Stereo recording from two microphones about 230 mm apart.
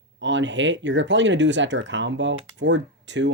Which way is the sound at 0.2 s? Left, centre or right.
Right.